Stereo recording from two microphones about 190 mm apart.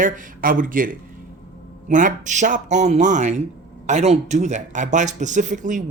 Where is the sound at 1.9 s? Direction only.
45° right (ahead or behind).